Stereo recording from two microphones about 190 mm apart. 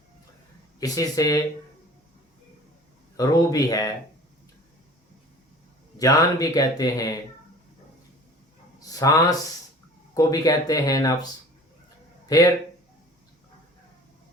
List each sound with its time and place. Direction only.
0.8 s speech: 20° left (ahead or behind)
3.2 s speech: 20° left (ahead or behind)
6.0 s speech: 20° left (ahead or behind)
8.8 s a sound: 20° left (ahead or behind)
10.2 s speech: 20° left (ahead or behind)
12.3 s speech: 20° left (ahead or behind)